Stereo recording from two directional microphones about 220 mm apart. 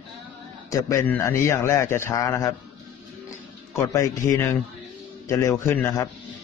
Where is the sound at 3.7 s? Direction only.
15° left (ahead or behind).